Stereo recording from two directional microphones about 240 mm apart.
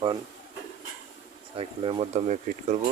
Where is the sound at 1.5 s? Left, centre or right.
Right.